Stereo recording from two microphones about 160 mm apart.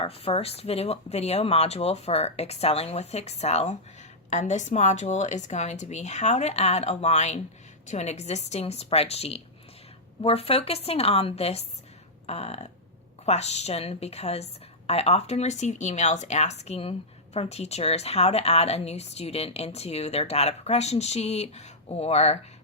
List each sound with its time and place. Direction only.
0.0 s a woman's voice: 40° left (ahead or behind)